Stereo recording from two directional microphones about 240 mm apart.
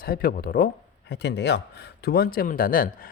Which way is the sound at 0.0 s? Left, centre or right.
Left.